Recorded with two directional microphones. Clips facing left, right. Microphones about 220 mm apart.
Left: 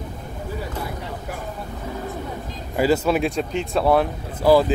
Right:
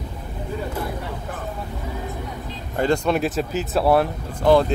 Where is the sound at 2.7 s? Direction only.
5° left (ahead or behind).